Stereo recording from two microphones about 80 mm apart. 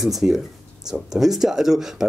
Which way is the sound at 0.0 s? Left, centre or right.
Centre.